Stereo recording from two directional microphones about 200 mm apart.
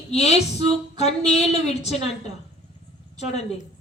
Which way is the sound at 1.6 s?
30° left (ahead or behind).